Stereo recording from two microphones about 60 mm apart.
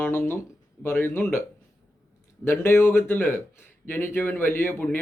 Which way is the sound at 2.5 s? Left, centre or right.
Left.